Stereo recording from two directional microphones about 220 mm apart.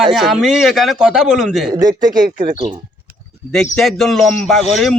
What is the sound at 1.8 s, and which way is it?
Speech, 15° right (ahead or behind).